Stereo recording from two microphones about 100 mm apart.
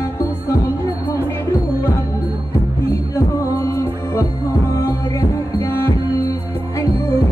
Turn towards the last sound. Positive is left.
turn(degrees=25)  # may be behind; listen again after turning